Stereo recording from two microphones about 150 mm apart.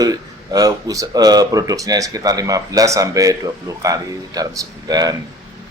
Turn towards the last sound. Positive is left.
turn(degrees=-25)  # may be behind; listen again after turning